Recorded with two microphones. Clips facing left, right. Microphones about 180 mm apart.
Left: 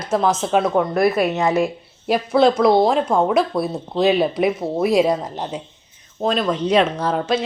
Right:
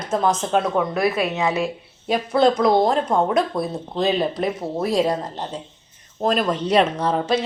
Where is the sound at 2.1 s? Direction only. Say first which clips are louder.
Left 2 dB; 5° left (ahead or behind).